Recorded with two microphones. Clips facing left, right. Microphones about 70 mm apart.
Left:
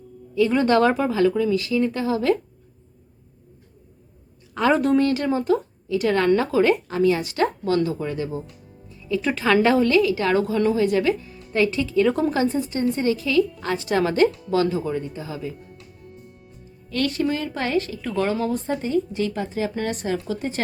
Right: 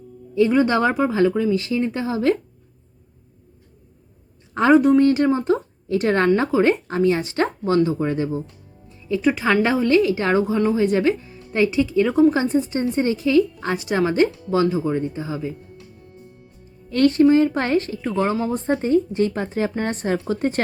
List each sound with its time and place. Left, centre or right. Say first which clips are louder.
0.5 s speech: left 3 dB; centre
1.4 s speech: even; right
4.7 s speech: right 6 dB; centre
4.9 s speech: right 4 dB; right
5.9 s a woman's voice: right 1 dB; right
9.0 s music: right 1 dB; right
9.2 s speech: even; centre
9.9 s speech: right 2 dB; right
16.9 s a woman's voice: right 9 dB; right
18.1 s a woman's voice: right 1 dB; centre; by 20.6 s right